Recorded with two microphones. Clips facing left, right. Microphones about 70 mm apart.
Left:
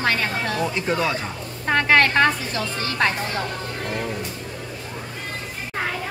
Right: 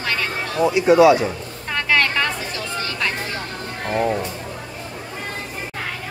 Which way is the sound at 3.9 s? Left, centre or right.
Right.